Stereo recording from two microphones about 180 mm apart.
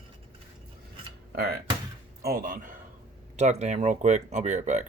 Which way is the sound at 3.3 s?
40° right (ahead or behind).